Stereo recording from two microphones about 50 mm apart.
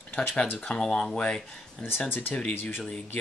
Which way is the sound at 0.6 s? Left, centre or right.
Centre.